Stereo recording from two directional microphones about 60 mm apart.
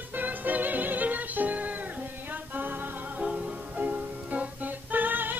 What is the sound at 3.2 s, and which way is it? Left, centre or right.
Music, centre.